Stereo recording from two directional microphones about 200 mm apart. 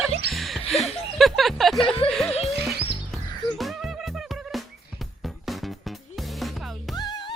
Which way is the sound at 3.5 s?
Centre (ahead or behind).